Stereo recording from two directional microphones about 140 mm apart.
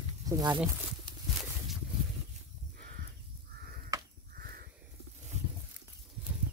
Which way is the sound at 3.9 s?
25° right (ahead or behind).